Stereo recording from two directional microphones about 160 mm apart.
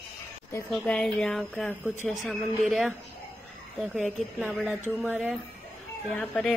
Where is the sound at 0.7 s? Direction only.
5° left (ahead or behind).